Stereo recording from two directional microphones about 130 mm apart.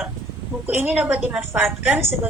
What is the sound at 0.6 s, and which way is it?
A woman's voice, 15° right (ahead or behind).